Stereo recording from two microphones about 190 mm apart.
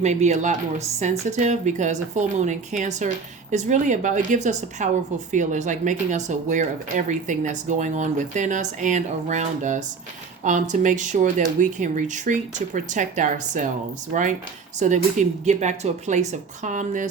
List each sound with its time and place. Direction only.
0.0 s speech: 35° right (ahead or behind)